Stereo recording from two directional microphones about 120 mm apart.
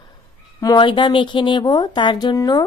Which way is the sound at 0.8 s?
45° left (ahead or behind).